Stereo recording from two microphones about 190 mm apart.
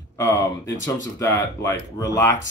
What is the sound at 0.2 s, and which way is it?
Speech, 15° left (ahead or behind).